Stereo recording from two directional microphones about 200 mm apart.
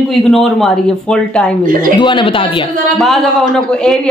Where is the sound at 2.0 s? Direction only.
25° left (ahead or behind).